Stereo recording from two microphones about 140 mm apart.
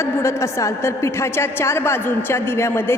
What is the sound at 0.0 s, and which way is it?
A woman's voice, 20° left (ahead or behind).